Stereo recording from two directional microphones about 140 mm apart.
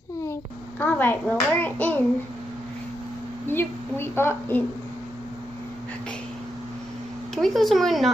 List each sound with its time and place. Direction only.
0.2 s a child's voice: 15° left (ahead or behind)
3.4 s a woman's voice: 15° left (ahead or behind)
7.3 s speech: centre (ahead or behind)